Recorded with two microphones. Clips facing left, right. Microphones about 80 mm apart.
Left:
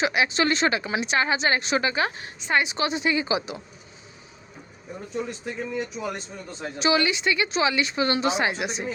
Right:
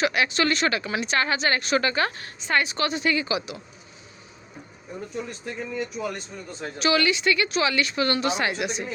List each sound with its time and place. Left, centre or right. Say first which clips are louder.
0.0 s a man's voice: even; centre
5.1 s a man's voice: left 4 dB; centre